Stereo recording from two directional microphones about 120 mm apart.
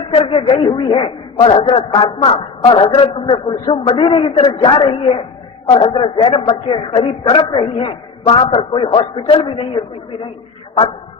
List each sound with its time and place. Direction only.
0.1 s a man's voice: 45° left (ahead or behind)